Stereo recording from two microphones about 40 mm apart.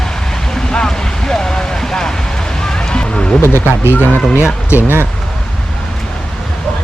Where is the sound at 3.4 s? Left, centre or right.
Left.